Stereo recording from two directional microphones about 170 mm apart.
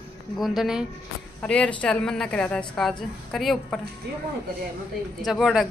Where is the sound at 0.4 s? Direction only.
Centre (ahead or behind).